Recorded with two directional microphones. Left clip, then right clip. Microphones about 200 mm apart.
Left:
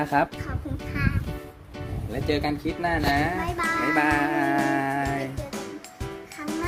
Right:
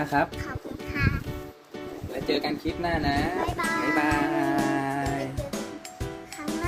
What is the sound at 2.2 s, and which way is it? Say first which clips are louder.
Speech: left 1 dB; centre (ahead or behind).